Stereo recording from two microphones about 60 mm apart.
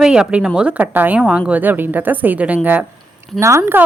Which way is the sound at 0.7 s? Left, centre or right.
Right.